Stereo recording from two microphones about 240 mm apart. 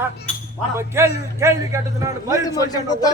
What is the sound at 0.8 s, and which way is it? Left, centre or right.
A man's voice, centre.